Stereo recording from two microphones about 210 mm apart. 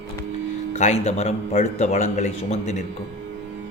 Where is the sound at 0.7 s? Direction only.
35° left (ahead or behind).